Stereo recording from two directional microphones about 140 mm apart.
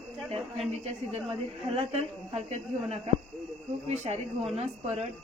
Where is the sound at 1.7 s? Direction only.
45° right (ahead or behind).